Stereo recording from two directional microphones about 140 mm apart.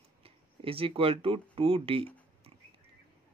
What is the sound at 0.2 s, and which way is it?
Speech, 40° right (ahead or behind).